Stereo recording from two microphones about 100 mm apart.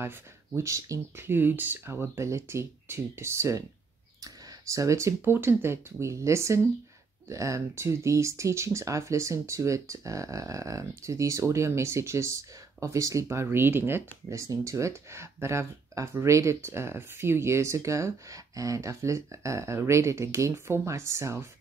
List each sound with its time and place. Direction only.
0.6 s speech: 30° right (ahead or behind)